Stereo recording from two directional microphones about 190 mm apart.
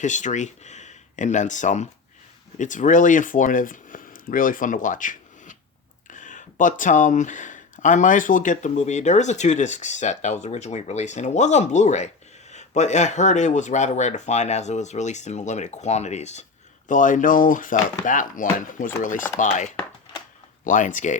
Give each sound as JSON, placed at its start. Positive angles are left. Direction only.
{"t": 0.0, "sound": "speech", "side_deg": 40}